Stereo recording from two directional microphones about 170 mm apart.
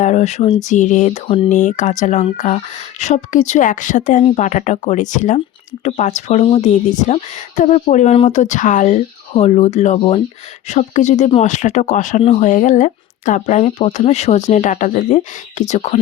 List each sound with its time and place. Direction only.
0.0 s speech: 40° left (ahead or behind)